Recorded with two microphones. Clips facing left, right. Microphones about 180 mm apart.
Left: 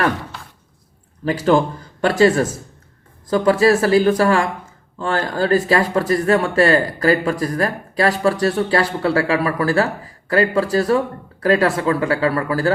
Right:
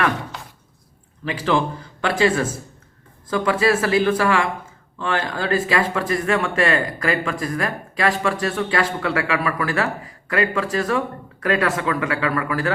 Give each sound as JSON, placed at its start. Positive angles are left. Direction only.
{"t": 1.2, "sound": "speech", "side_deg": 45}